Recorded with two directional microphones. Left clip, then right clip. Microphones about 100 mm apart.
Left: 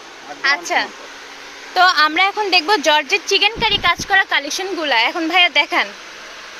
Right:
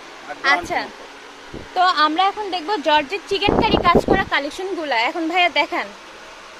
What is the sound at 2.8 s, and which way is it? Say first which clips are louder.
Speech: left 3 dB; 25° left (ahead or behind).